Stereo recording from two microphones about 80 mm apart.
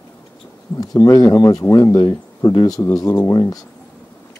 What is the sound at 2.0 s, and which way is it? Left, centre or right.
Speech, left.